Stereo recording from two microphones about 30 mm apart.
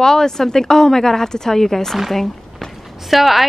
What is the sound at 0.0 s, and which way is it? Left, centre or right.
A woman's voice, centre.